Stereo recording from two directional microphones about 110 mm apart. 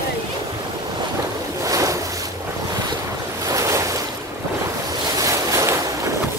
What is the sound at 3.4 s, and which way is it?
Ocean, 30° right (ahead or behind).